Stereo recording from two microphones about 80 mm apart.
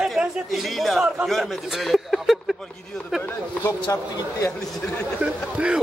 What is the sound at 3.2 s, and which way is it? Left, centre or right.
Speech, left.